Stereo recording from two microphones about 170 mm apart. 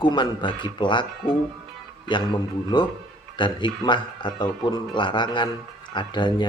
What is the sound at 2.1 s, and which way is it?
A man's voice, 25° left (ahead or behind).